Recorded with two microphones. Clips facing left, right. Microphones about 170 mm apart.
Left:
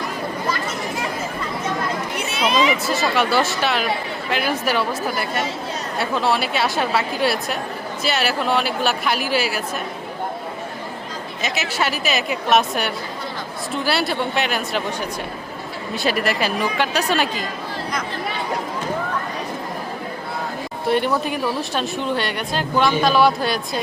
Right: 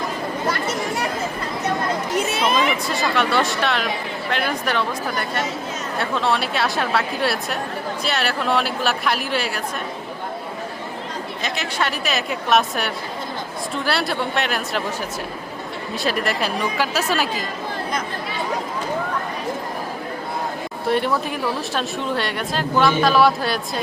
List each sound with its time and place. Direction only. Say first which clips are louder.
2.5 s speech: left 4 dB; 55° right (ahead or behind)
2.8 s speech: left 1 dB; 5° left (ahead or behind)
11.4 s speech: left 2 dB; 5° left (ahead or behind)
16.0 s speech: left 2 dB; centre (ahead or behind)
20.9 s speech: left 1 dB; centre (ahead or behind)